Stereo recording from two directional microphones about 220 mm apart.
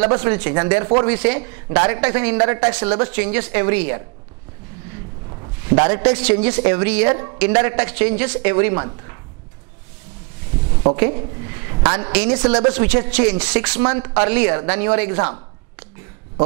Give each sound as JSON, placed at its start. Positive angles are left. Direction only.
{"t": 0.0, "sound": "a woman's voice", "side_deg": -20}
{"t": 5.8, "sound": "a woman's voice", "side_deg": -20}
{"t": 10.8, "sound": "a woman's voice", "side_deg": -30}
{"t": 12.8, "sound": "a woman's voice", "side_deg": -10}